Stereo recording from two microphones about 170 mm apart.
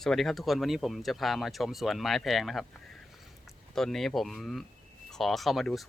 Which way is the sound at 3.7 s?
Centre (ahead or behind).